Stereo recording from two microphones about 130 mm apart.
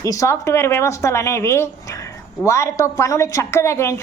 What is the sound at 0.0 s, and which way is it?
Speech, 25° left (ahead or behind).